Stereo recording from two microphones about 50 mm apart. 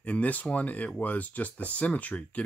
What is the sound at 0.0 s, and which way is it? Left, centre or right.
Speech, left.